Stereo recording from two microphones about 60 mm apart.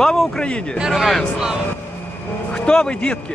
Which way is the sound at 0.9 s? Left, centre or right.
Centre.